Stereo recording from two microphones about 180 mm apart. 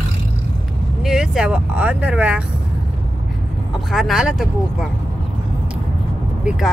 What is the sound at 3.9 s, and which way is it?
Speech, centre (ahead or behind).